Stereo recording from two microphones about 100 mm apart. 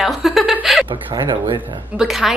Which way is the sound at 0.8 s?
55° right (ahead or behind).